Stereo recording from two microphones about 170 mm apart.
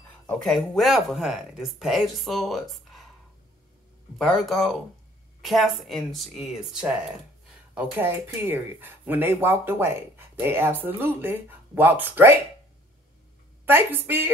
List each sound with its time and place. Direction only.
0.3 s speech: 5° left (ahead or behind)
4.2 s speech: centre (ahead or behind)
13.7 s speech: 10° right (ahead or behind)